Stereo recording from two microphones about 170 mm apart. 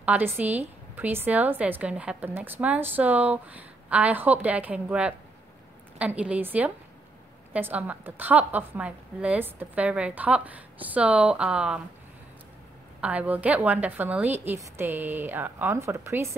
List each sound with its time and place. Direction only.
0.0 s a woman's voice: 10° right (ahead or behind)
13.0 s a woman's voice: 5° right (ahead or behind)